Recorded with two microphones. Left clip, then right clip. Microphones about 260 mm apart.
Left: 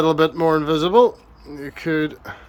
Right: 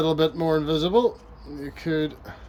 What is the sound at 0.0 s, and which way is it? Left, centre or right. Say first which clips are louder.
Speech: left 6 dB; centre.